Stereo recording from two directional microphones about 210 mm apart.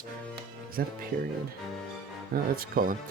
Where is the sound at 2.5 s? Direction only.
40° right (ahead or behind).